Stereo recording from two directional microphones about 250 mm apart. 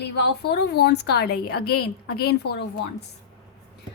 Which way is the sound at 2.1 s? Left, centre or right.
Left.